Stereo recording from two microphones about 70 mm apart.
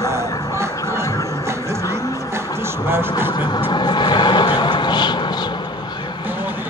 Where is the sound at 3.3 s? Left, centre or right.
Left.